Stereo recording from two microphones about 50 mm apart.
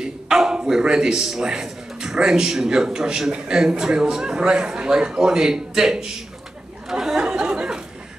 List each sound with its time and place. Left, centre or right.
0.0 s a sound: centre
1.4 s a man's voice: centre
6.9 s chatter: centre